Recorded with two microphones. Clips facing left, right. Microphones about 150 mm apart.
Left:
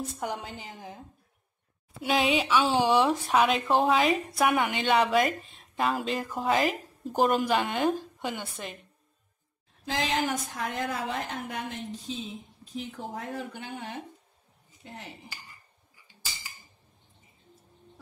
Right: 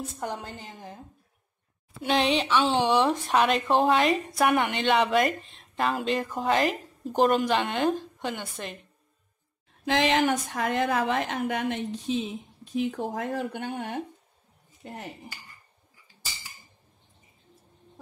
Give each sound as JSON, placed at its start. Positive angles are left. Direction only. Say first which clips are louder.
{"t": 0.0, "sound": "speech", "louder": "even", "side_deg": 0}
{"t": 9.8, "sound": "a woman's voice", "louder": "right 6 dB", "side_deg": -65}